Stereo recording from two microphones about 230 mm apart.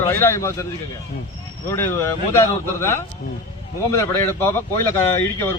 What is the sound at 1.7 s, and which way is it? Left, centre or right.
Speech, centre.